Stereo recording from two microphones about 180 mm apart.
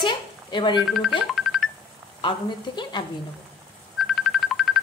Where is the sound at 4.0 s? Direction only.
Centre (ahead or behind).